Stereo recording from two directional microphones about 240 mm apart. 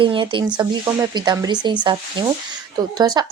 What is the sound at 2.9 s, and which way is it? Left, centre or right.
Speech, centre.